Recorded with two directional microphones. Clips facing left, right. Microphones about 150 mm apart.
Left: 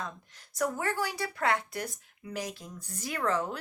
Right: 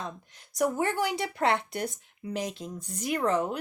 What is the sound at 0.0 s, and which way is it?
Speech, 20° right (ahead or behind).